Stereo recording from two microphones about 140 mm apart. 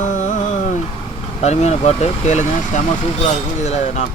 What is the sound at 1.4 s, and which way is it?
Speech, 50° left (ahead or behind).